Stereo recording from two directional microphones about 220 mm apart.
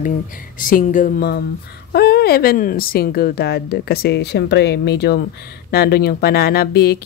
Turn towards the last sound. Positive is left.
turn(degrees=45)  # may be behind; listen again after turning